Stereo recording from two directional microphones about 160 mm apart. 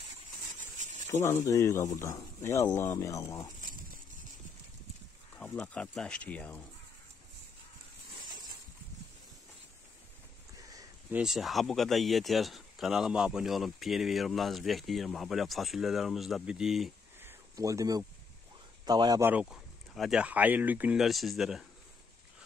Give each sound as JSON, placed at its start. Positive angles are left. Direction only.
{"t": 1.2, "sound": "speech", "side_deg": 20}
{"t": 5.4, "sound": "speech", "side_deg": 5}
{"t": 10.6, "sound": "a sound", "side_deg": -20}
{"t": 11.1, "sound": "speech", "side_deg": 0}
{"t": 17.2, "sound": "a sound", "side_deg": -15}
{"t": 18.9, "sound": "speech", "side_deg": -25}
{"t": 19.3, "sound": "speech", "side_deg": 0}